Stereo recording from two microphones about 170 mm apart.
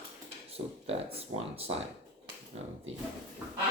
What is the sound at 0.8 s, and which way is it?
Speech, 35° right (ahead or behind).